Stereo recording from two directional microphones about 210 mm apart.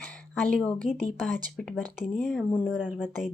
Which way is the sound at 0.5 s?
5° left (ahead or behind).